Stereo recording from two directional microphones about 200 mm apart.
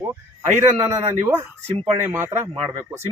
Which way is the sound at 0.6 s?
15° right (ahead or behind).